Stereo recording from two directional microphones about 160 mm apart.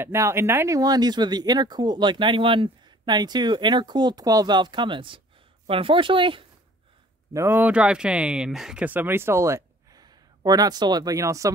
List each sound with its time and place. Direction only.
0.0 s speech: 15° right (ahead or behind); by 6.4 s 30° right (ahead or behind)
7.3 s speech: 15° right (ahead or behind)